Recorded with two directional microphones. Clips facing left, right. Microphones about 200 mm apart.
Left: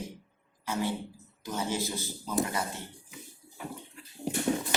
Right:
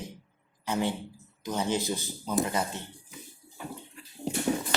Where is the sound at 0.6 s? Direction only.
20° right (ahead or behind).